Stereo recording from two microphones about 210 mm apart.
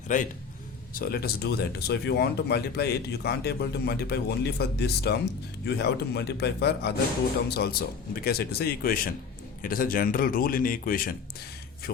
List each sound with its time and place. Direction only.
0.1 s speech: 35° left (ahead or behind)